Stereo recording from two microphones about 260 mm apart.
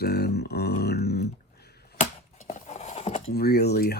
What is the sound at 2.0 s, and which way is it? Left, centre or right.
Scissors, left.